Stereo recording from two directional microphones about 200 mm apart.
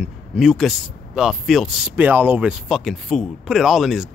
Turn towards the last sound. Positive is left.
turn(degrees=0)  # may be behind; listen again after turning